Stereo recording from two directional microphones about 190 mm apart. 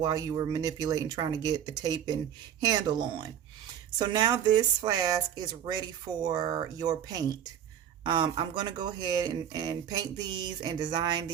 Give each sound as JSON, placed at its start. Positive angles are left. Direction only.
{"t": 0.0, "sound": "speech", "side_deg": -20}